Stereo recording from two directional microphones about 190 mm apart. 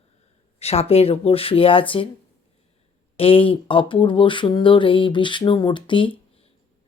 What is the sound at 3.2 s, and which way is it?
Speech, 30° left (ahead or behind).